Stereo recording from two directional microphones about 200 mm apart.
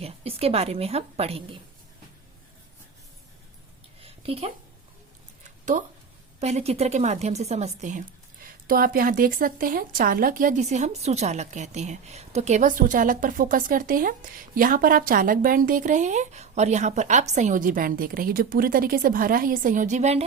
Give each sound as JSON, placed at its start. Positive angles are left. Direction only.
{"t": 0.0, "sound": "a woman's voice", "side_deg": -30}
{"t": 4.0, "sound": "a sound", "side_deg": -30}
{"t": 6.4, "sound": "a woman's voice", "side_deg": -30}